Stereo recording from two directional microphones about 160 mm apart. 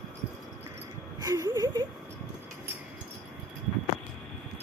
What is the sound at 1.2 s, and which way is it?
Speech, 20° right (ahead or behind).